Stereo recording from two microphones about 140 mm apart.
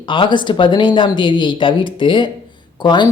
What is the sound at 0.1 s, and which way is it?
Speech, 35° left (ahead or behind).